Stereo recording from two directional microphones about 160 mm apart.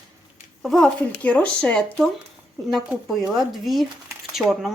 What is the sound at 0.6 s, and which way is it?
A woman's voice, centre (ahead or behind).